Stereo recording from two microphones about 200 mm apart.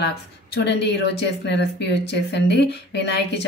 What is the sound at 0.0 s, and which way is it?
Speech, 55° left (ahead or behind).